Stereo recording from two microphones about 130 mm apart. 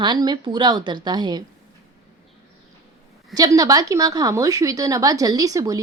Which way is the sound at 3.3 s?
25° right (ahead or behind).